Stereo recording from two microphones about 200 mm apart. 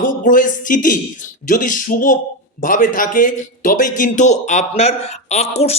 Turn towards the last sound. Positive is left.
turn(degrees=30)  # may be behind; listen again after turning